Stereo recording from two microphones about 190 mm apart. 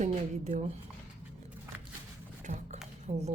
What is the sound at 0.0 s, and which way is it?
Speech, 40° right (ahead or behind).